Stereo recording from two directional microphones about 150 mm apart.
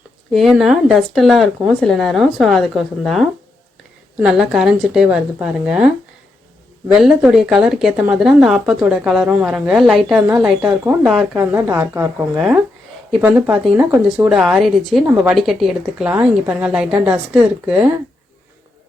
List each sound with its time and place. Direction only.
0.3 s speech: centre (ahead or behind)
11.3 s speech: 15° right (ahead or behind)